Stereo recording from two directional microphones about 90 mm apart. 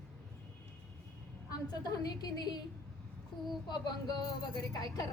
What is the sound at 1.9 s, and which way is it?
Speech, 50° left (ahead or behind).